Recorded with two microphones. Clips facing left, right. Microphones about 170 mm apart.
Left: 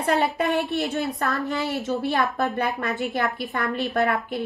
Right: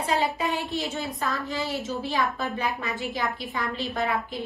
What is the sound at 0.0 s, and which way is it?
A woman's voice, 60° left (ahead or behind).